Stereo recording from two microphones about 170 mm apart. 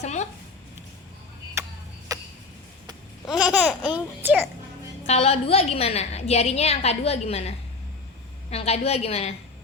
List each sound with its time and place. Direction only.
0.0 s speech: 40° left (ahead or behind)
1.6 s clock: 15° right (ahead or behind)
2.1 s a sound: 20° right (ahead or behind)
3.4 s speech: 5° right (ahead or behind)
5.0 s a woman's voice: 40° left (ahead or behind)